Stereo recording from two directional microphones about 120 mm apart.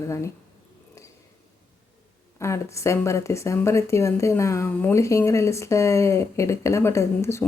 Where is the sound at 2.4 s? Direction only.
25° left (ahead or behind).